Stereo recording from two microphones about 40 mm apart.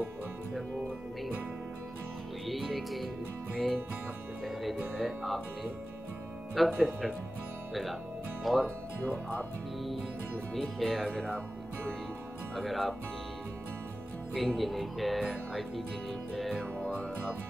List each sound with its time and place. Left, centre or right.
2.6 s music: centre
6.5 s speech: centre
10.5 s speech: centre
12.5 s speech: centre
14.3 s speech: centre